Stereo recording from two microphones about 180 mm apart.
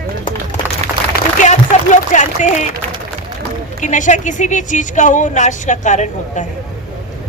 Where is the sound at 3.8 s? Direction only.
45° left (ahead or behind).